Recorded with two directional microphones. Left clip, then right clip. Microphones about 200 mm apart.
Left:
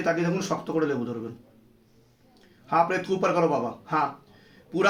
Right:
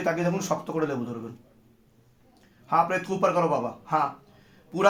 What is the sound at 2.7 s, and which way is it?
Speech, 30° right (ahead or behind).